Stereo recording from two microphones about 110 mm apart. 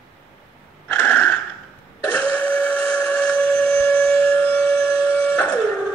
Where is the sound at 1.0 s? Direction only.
20° left (ahead or behind).